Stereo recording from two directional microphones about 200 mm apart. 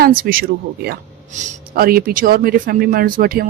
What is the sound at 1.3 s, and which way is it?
Speech, 35° right (ahead or behind).